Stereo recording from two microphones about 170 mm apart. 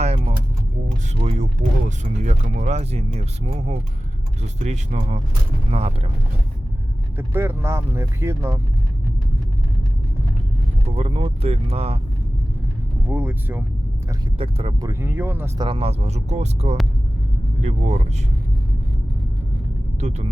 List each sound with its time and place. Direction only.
0.0 s keys jangling: 35° right (ahead or behind)
1.1 s speech: 40° right (ahead or behind)
7.2 s speech: 15° right (ahead or behind)
10.8 s speech: 35° right (ahead or behind)
13.1 s speech: 10° right (ahead or behind)
14.3 s speech: 35° right (ahead or behind)
14.8 s speech: 15° right (ahead or behind)
15.5 s speech: 30° right (ahead or behind)
20.0 s speech: 40° right (ahead or behind)